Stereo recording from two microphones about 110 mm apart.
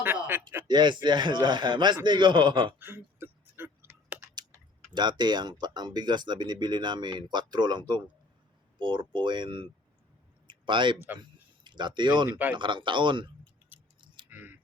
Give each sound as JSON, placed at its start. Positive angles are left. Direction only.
{"t": 0.0, "sound": "speech", "side_deg": -20}
{"t": 0.7, "sound": "speech", "side_deg": -45}
{"t": 2.7, "sound": "a sound", "side_deg": -20}
{"t": 4.9, "sound": "speech", "side_deg": -40}
{"t": 10.4, "sound": "a sound", "side_deg": -45}
{"t": 11.2, "sound": "speech", "side_deg": -45}
{"t": 13.7, "sound": "keys jangling", "side_deg": -15}